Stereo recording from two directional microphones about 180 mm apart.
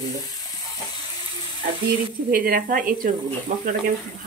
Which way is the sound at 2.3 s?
50° right (ahead or behind).